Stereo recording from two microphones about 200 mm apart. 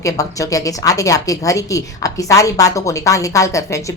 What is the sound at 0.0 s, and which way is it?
A woman's voice, 15° left (ahead or behind).